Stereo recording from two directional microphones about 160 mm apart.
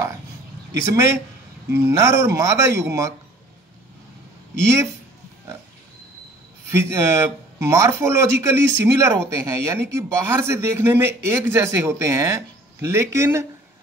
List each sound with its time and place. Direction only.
0.8 s speech: 20° right (ahead or behind)
6.7 s speech: 15° right (ahead or behind)